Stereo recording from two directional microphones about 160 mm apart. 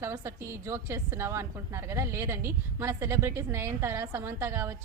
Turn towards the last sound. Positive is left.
turn(degrees=-15)  # may be behind; listen again after turning